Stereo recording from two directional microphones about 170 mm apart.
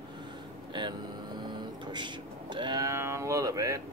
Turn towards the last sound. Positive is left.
turn(degrees=-20)  # may be behind; listen again after turning